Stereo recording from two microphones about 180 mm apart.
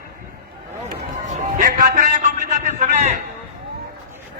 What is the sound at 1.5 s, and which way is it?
A man's voice, 45° right (ahead or behind).